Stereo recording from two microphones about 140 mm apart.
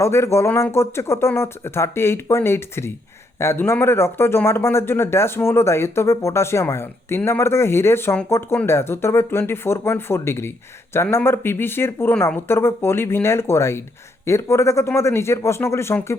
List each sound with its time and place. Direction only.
0.0 s speech: 20° left (ahead or behind)